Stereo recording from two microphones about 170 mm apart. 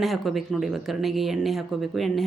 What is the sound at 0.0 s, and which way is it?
Speech, centre (ahead or behind).